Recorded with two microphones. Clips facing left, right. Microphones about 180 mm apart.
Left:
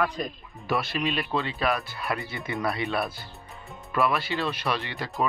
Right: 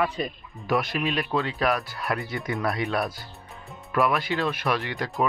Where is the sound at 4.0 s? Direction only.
15° right (ahead or behind).